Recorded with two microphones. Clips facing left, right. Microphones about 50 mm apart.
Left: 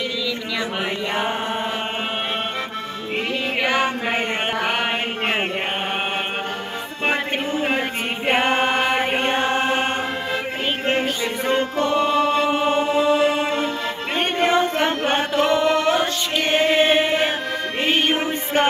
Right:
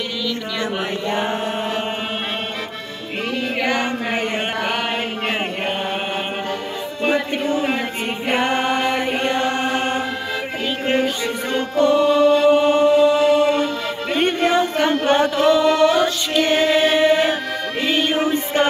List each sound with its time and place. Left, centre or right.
3.6 s chant: centre
8.3 s chant: left
11.4 s music: left
14.9 s music: left